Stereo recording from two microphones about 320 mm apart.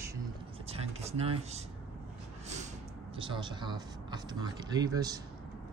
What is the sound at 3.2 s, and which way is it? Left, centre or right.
Speech, centre.